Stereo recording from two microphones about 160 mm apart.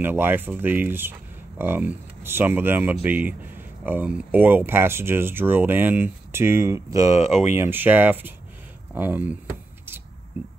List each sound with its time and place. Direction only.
0.0 s speech: 15° right (ahead or behind)
7.2 s speech: 45° left (ahead or behind)
7.5 s speech: 15° right (ahead or behind)